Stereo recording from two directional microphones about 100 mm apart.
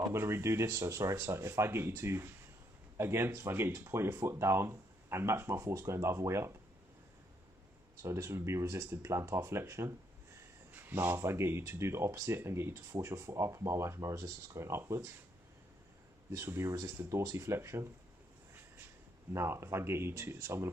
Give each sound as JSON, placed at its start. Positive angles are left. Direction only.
{"t": 0.1, "sound": "speech", "side_deg": -25}
{"t": 8.0, "sound": "speech", "side_deg": -25}
{"t": 16.3, "sound": "speech", "side_deg": -30}
{"t": 19.3, "sound": "speech", "side_deg": -25}